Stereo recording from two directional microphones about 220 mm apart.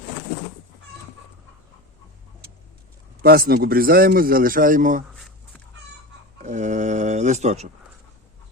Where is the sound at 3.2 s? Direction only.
45° right (ahead or behind).